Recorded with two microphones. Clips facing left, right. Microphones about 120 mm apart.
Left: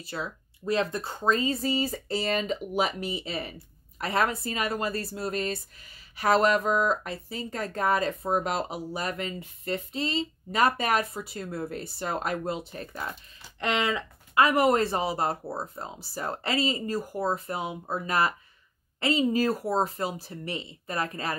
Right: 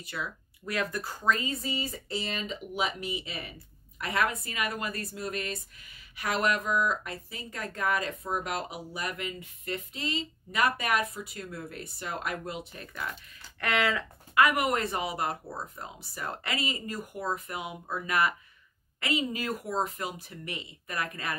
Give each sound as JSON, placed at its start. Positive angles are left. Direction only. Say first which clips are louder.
{"t": 0.0, "sound": "speech", "louder": "left 3 dB", "side_deg": 30}